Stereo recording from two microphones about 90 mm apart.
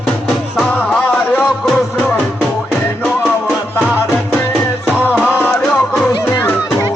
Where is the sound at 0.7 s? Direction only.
15° left (ahead or behind).